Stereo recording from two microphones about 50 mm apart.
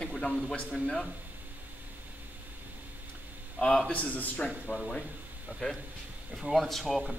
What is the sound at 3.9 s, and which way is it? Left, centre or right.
Speech, left.